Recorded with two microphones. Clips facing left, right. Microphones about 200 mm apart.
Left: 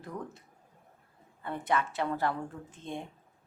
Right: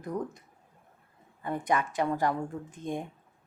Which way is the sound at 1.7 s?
15° right (ahead or behind).